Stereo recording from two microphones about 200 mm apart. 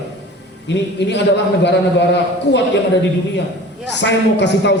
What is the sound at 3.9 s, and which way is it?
Speech, 60° left (ahead or behind).